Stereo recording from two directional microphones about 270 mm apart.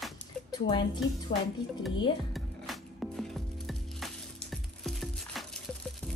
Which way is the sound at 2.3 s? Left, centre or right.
Centre.